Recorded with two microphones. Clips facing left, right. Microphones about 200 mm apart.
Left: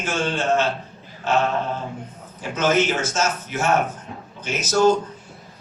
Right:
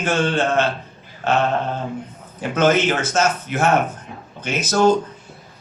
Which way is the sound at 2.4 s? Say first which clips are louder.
Right 3 dB; 55° right (ahead or behind).